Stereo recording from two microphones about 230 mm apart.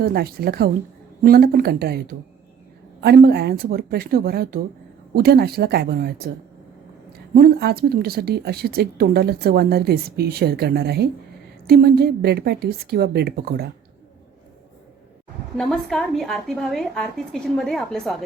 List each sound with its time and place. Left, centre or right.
0.0 s a woman's voice: right
7.3 s speech: right
15.5 s a woman's voice: centre